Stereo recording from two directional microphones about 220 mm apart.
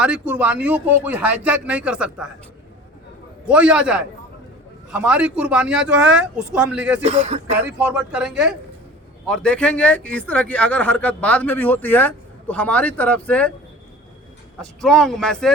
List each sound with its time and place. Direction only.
0.0 s speech: 5° right (ahead or behind)
3.4 s a man's voice: 5° right (ahead or behind)
7.0 s speech: 30° right (ahead or behind)
7.6 s speech: 10° right (ahead or behind)
14.6 s a man's voice: centre (ahead or behind)